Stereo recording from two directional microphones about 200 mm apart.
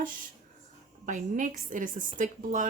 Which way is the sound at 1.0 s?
40° right (ahead or behind).